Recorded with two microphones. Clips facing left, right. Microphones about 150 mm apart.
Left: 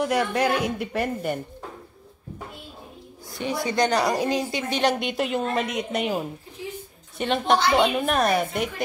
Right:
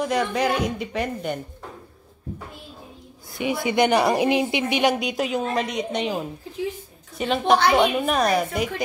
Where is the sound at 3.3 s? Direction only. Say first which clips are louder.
Right 3 dB; 15° right (ahead or behind).